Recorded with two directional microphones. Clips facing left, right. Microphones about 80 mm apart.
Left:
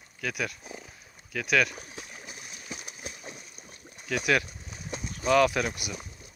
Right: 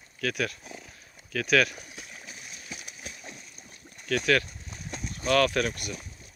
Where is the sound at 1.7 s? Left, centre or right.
Left; by 4.4 s centre.